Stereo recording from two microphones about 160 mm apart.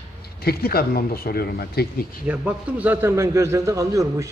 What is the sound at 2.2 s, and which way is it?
A man's voice, 10° right (ahead or behind).